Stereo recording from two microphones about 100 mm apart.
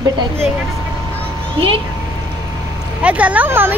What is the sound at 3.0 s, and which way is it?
Speech, 15° right (ahead or behind).